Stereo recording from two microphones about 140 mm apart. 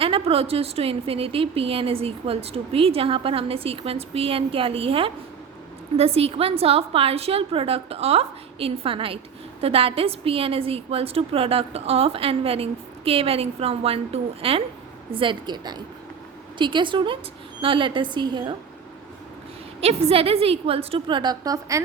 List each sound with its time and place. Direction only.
0.0 s a woman's voice: 40° right (ahead or behind)
19.8 s a woman's voice: 45° right (ahead or behind); by 21.8 s 25° right (ahead or behind)